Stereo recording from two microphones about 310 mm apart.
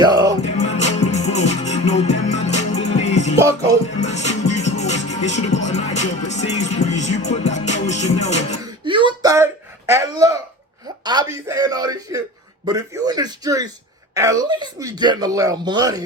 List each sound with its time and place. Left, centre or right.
0.0 s music: centre
0.5 s music: left
3.3 s speech: centre
4.0 s music: left
8.6 s a sound: centre
11.0 s speech: centre